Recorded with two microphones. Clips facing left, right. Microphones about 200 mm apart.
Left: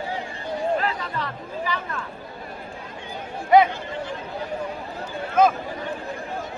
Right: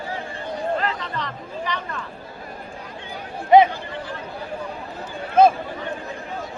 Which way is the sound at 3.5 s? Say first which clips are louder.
Right 3 dB; 20° right (ahead or behind).